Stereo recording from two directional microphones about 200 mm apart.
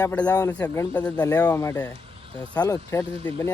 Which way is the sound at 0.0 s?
10° left (ahead or behind).